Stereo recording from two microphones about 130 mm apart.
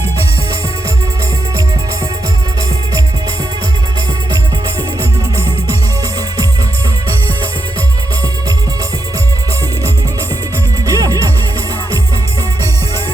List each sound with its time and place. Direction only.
10.8 s music: 25° right (ahead or behind)